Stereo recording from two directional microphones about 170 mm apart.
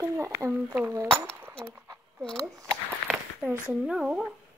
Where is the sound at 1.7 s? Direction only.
15° right (ahead or behind).